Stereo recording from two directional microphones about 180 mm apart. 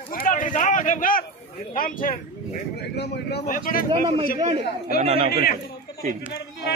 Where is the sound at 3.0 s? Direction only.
65° left (ahead or behind).